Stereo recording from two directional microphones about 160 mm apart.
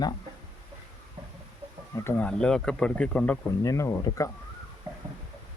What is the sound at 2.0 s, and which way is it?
Speech, 10° left (ahead or behind).